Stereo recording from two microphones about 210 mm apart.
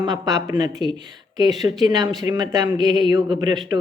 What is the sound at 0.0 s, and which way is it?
A woman's voice, 20° right (ahead or behind).